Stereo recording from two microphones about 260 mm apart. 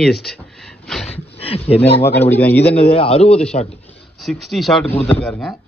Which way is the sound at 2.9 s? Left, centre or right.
Left.